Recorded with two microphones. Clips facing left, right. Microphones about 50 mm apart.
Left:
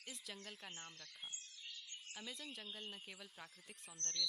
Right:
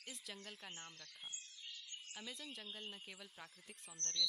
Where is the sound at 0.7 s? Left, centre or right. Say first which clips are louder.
Even; right.